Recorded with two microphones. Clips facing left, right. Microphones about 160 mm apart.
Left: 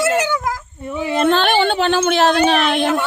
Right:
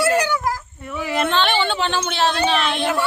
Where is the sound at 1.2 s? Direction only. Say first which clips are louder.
Left 5 dB; 45° left (ahead or behind).